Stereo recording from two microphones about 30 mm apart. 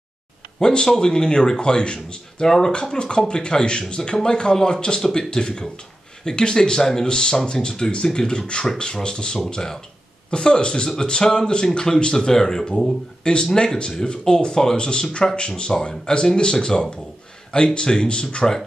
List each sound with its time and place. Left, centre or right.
0.6 s speech: left
2.4 s speech: centre
2.7 s speech: left
10.3 s speech: left